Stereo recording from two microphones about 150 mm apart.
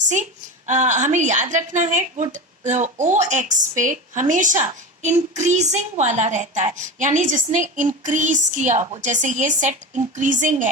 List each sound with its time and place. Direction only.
0.7 s a woman's voice: 55° right (ahead or behind)